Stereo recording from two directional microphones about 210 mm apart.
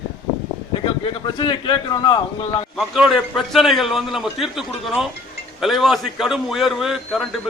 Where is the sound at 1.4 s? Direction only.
20° left (ahead or behind).